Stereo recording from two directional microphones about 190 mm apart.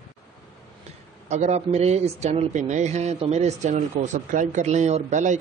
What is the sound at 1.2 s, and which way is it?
Speech, 35° right (ahead or behind).